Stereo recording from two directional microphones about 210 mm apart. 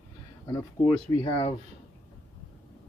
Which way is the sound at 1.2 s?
25° left (ahead or behind).